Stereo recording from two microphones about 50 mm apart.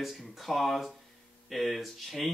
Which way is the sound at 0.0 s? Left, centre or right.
Centre.